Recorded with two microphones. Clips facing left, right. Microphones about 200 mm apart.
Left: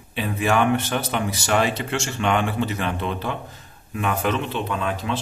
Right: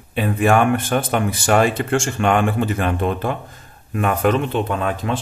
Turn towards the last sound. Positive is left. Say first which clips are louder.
# right 3 dB
turn(degrees=-50)  # may be behind; listen again after turning